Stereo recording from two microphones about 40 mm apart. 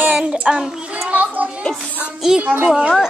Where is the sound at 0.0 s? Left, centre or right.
Right.